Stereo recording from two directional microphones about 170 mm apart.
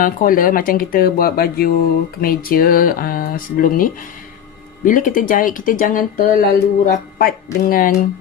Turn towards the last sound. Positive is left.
turn(degrees=55)  # may be behind; listen again after turning